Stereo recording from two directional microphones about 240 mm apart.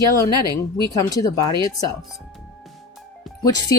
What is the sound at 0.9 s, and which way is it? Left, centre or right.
Speech, centre.